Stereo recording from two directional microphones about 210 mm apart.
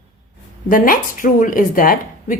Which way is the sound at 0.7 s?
40° left (ahead or behind).